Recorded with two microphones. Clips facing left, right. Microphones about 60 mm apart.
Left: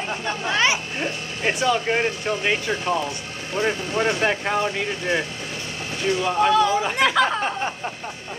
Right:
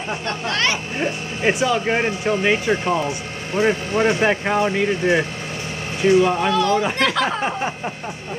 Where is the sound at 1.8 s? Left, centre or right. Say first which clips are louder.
Right 3 dB; centre.